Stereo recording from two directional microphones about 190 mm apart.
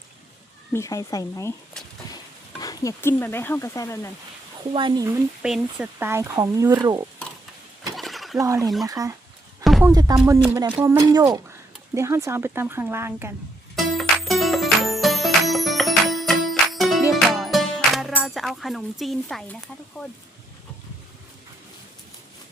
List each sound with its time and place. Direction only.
0.7 s speech: 15° left (ahead or behind)
2.6 s speech: 20° left (ahead or behind)
4.7 s speech: 25° right (ahead or behind)
5.0 s speech: 15° right (ahead or behind)
7.9 s a sound: centre (ahead or behind)
8.4 s speech: 15° right (ahead or behind)
13.7 s music: centre (ahead or behind)